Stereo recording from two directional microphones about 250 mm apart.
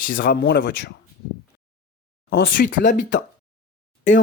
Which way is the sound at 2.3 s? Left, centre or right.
Left.